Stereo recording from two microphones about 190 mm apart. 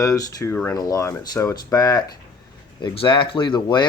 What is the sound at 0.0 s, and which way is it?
Speech, 15° left (ahead or behind).